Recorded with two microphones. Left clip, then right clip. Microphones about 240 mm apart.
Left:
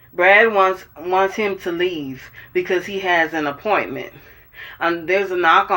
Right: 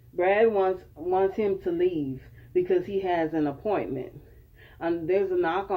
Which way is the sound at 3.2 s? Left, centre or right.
Centre.